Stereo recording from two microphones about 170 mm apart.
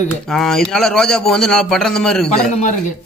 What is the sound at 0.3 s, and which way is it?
A man's voice, centre (ahead or behind).